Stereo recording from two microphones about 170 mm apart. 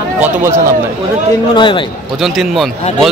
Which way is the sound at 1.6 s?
30° left (ahead or behind).